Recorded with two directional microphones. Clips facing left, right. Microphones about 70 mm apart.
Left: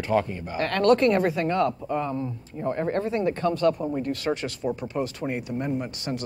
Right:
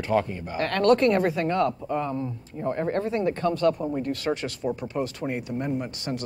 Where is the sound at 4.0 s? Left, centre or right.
Centre.